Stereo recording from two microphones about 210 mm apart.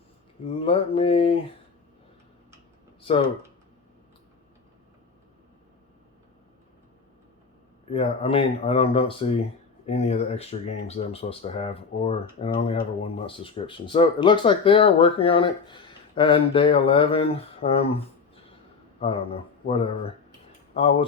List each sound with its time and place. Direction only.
0.4 s speech: 25° left (ahead or behind)
7.9 s speech: 25° left (ahead or behind)